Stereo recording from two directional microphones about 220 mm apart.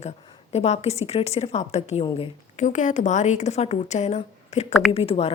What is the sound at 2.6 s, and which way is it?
A woman's voice, 35° left (ahead or behind).